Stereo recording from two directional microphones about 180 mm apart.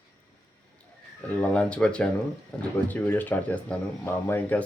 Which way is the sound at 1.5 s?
5° left (ahead or behind).